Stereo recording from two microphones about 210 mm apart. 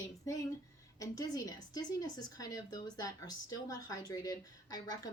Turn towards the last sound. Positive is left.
turn(degrees=20)  # may be behind; listen again after turning